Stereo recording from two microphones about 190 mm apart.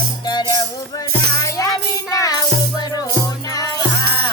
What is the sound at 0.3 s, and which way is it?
Music, 20° left (ahead or behind).